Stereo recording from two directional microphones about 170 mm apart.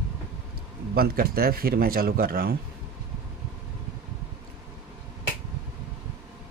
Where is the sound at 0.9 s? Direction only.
60° right (ahead or behind).